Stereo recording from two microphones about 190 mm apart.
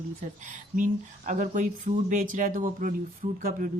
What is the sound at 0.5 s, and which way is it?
Speech, 40° right (ahead or behind).